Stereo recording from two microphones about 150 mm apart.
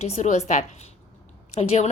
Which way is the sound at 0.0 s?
50° left (ahead or behind).